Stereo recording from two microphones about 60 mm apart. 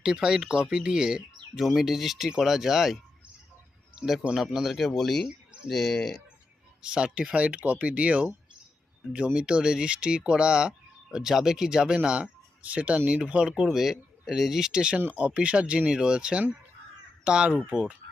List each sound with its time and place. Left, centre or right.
0.0 s speech: centre
3.9 s a sound: centre
4.4 s speech: centre
6.8 s speech: centre
13.7 s speech: centre